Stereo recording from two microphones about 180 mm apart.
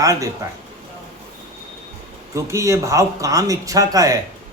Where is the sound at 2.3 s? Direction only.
15° right (ahead or behind).